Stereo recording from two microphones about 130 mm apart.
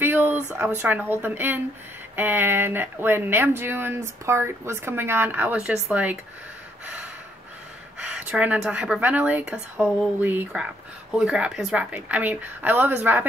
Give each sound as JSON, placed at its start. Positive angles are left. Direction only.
{"t": 0.0, "sound": "speech", "side_deg": -15}
{"t": 8.0, "sound": "speech", "side_deg": -10}